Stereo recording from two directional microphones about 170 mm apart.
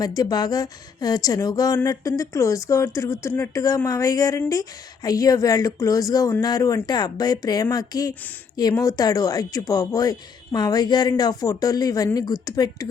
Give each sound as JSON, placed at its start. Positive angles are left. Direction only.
{"t": 0.0, "sound": "a woman's voice", "side_deg": 25}